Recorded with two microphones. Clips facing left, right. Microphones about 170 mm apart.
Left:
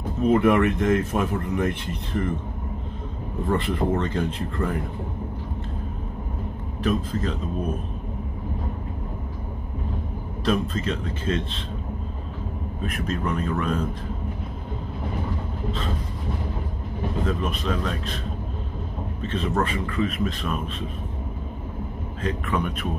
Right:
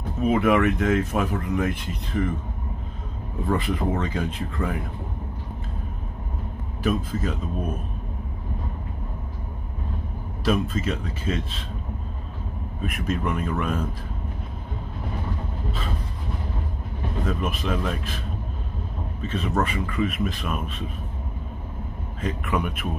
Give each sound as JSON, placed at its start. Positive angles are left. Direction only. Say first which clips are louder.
{"t": 0.3, "sound": "speech", "louder": "left 1 dB", "side_deg": 0}
{"t": 3.4, "sound": "speech", "louder": "left 1 dB", "side_deg": 0}
{"t": 6.8, "sound": "speech", "louder": "even", "side_deg": -5}
{"t": 10.4, "sound": "speech", "louder": "even", "side_deg": -5}
{"t": 12.8, "sound": "speech", "louder": "right 1 dB", "side_deg": -5}
{"t": 17.3, "sound": "speech", "louder": "right 3 dB", "side_deg": -5}
{"t": 19.2, "sound": "speech", "louder": "even", "side_deg": -5}
{"t": 22.2, "sound": "speech", "louder": "even", "side_deg": -5}